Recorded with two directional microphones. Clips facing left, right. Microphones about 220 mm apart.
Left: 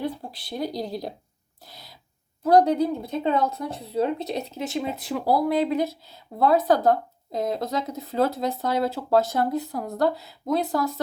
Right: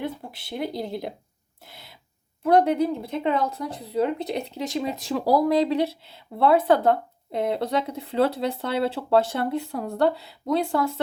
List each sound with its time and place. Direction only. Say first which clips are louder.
0.0 s speech: left 1 dB; 20° right (ahead or behind)
2.4 s speech: left 1 dB; 25° right (ahead or behind)